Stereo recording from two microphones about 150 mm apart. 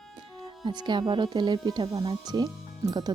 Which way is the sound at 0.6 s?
30° right (ahead or behind).